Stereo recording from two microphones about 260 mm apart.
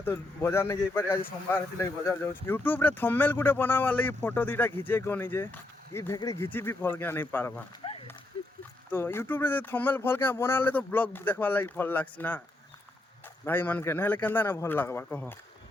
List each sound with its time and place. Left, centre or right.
0.0 s speech: centre
7.8 s a sound: centre
8.9 s speech: centre
13.4 s speech: centre